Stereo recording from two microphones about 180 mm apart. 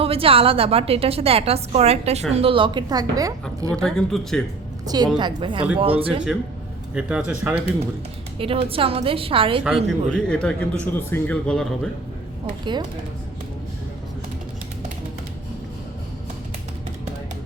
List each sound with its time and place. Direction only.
0.0 s a woman's voice: 30° right (ahead or behind)
3.8 s a man's voice: centre (ahead or behind)
5.1 s a woman's voice: 25° right (ahead or behind)
6.9 s a man's voice: 5° right (ahead or behind)
8.4 s a woman's voice: 30° right (ahead or behind)
9.6 s a man's voice: centre (ahead or behind)